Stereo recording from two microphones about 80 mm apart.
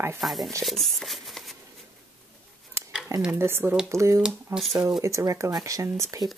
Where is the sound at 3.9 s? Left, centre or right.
Right.